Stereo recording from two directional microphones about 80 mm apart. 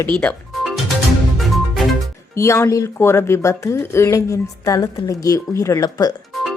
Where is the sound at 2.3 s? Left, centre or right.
Left.